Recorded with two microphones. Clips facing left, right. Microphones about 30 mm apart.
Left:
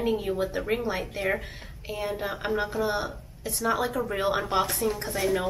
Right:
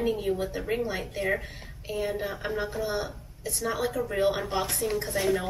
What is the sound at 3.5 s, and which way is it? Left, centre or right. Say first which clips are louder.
A woman's voice: left 3 dB; centre.